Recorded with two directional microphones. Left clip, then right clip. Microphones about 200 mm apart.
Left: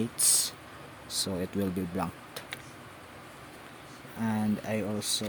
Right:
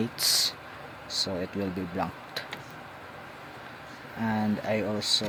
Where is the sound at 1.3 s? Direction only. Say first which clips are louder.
Right 1 dB; 50° left (ahead or behind).